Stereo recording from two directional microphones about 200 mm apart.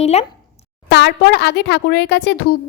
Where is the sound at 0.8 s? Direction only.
55° left (ahead or behind).